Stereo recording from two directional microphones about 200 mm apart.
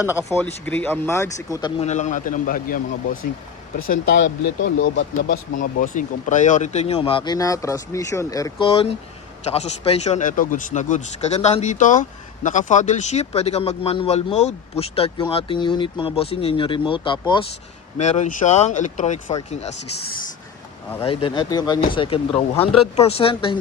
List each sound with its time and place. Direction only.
0.2 s speech: 10° left (ahead or behind)
1.8 s speech: 35° left (ahead or behind)
4.1 s speech: 60° left (ahead or behind)
5.3 s speech: 40° left (ahead or behind); by 17.4 s 25° left (ahead or behind)
17.9 s speech: 35° left (ahead or behind)
21.0 s speech: 30° left (ahead or behind)